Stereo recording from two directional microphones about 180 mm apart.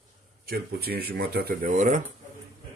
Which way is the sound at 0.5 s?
60° right (ahead or behind).